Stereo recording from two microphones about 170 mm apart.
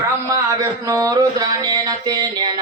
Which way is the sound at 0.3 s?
20° right (ahead or behind).